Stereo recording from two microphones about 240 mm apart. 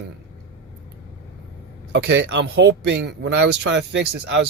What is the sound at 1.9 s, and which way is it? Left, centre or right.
Speech, right.